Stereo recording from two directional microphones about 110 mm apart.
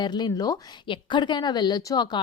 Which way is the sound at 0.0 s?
40° left (ahead or behind).